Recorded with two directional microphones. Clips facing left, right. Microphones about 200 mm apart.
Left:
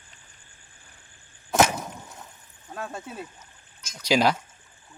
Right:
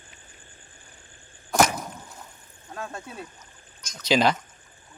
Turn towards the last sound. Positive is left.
turn(degrees=10)  # may be behind; listen again after turning